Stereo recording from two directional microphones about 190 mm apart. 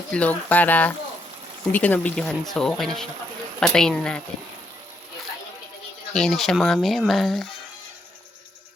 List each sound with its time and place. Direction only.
0.1 s speech: 10° left (ahead or behind)
6.1 s speech: centre (ahead or behind)